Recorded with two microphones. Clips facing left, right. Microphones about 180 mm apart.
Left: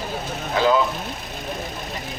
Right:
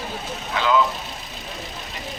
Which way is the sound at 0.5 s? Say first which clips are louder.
Left 2 dB; 40° left (ahead or behind).